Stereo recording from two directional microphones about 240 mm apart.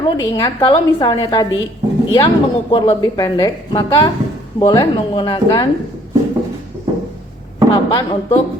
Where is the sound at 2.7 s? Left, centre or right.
Centre.